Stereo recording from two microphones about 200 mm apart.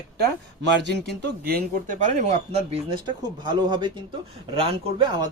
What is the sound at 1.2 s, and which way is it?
Speech, 50° right (ahead or behind).